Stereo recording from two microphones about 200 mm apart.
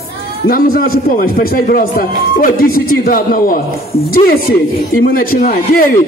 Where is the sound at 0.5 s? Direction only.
45° left (ahead or behind).